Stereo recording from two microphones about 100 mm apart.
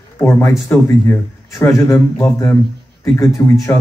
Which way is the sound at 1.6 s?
25° left (ahead or behind).